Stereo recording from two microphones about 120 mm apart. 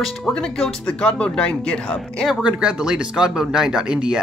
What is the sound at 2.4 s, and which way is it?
Speech, 10° right (ahead or behind).